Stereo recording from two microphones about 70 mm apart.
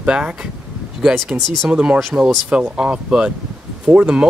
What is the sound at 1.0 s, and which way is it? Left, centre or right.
Speech, centre.